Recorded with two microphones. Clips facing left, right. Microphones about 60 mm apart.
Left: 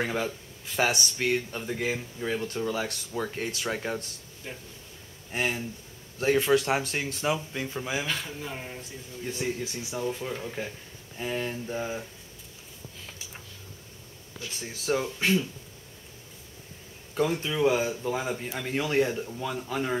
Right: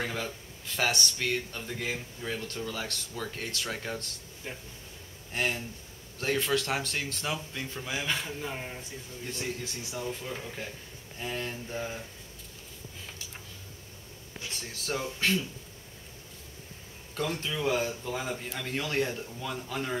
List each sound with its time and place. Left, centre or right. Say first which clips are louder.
0.0 s speech: left 5 dB; centre
4.4 s speech: even; centre
5.3 s speech: left 2 dB; centre
8.1 s speech: even; centre
9.2 s speech: left 5 dB; centre
14.6 s speech: left 6 dB; centre
17.1 s speech: left 5 dB; centre